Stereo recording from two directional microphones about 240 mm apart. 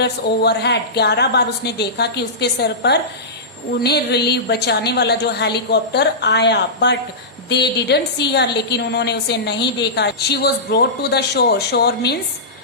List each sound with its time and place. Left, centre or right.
0.0 s a woman's voice: left